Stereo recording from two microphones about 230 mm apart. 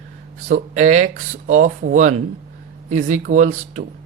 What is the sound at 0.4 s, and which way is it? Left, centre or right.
Speech, right.